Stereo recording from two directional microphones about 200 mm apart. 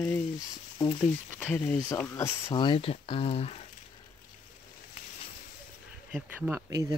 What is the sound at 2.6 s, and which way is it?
Speech, 25° left (ahead or behind).